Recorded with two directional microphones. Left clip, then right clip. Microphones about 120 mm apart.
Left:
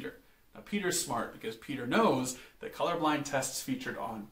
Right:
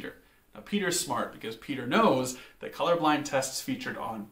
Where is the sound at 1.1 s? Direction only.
35° right (ahead or behind).